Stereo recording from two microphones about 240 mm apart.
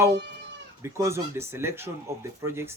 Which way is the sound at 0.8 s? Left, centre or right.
Centre.